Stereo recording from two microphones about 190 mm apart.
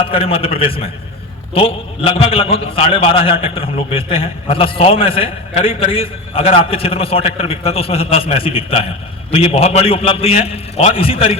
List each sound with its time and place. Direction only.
0.0 s a man's voice: 30° left (ahead or behind)